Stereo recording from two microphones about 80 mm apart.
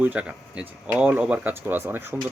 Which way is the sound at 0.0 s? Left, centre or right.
Centre.